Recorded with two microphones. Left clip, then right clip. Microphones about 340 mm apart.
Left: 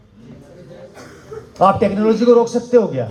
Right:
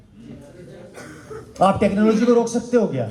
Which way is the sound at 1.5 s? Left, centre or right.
Left.